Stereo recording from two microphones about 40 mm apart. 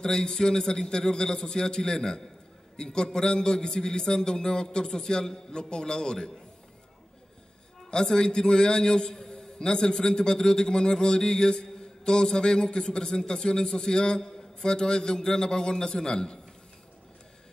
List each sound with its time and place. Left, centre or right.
0.0 s a man's voice: centre
7.9 s a man's voice: centre